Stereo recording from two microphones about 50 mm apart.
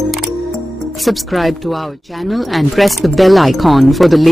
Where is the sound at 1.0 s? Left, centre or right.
Centre.